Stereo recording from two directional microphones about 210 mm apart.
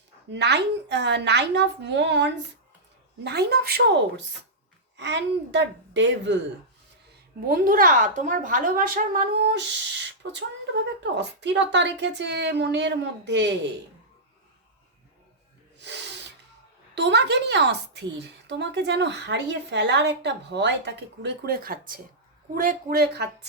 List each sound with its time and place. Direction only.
0.3 s a woman's voice: 55° right (ahead or behind)
7.4 s a woman's voice: 45° right (ahead or behind)
11.0 s a woman's voice: 55° right (ahead or behind)
15.8 s snort: 55° right (ahead or behind)
16.9 s a woman's voice: 55° right (ahead or behind)